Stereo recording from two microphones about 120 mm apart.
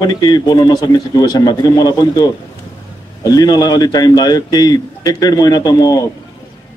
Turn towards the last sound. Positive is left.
turn(degrees=30)  # may be behind; listen again after turning